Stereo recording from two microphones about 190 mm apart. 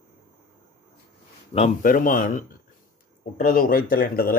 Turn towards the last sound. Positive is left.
turn(degrees=50)  # may be behind; listen again after turning